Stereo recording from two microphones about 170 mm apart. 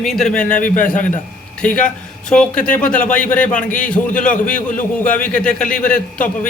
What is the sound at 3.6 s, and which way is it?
Speech, 50° left (ahead or behind).